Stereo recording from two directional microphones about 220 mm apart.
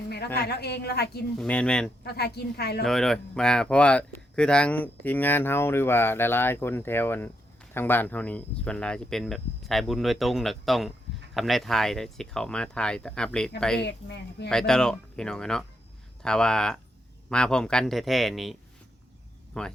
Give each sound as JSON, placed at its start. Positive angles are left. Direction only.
{"t": 0.3, "sound": "a woman's voice", "side_deg": 45}
{"t": 1.4, "sound": "speech", "side_deg": 5}
{"t": 2.0, "sound": "a woman's voice", "side_deg": 45}
{"t": 2.8, "sound": "speech", "side_deg": 0}
{"t": 13.8, "sound": "a woman's voice", "side_deg": 50}
{"t": 14.5, "sound": "speech", "side_deg": 5}
{"t": 19.6, "sound": "speech", "side_deg": 5}